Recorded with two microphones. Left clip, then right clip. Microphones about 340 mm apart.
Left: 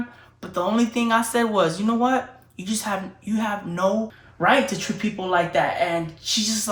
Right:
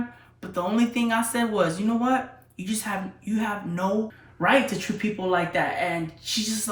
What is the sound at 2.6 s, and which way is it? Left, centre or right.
A woman's voice, centre.